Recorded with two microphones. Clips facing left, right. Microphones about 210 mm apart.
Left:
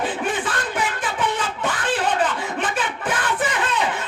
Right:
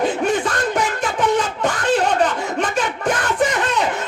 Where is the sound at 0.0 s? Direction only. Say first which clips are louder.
Right 6 dB; 40° right (ahead or behind).